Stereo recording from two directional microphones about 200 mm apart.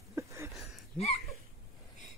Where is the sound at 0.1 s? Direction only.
15° right (ahead or behind).